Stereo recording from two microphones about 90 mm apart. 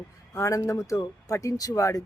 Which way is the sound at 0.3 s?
35° left (ahead or behind).